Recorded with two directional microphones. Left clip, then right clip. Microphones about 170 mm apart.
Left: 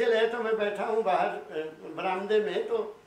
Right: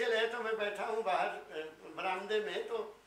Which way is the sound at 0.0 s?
10° left (ahead or behind).